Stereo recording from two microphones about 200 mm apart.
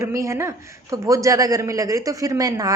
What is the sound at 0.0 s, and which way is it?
A man's voice, 15° right (ahead or behind).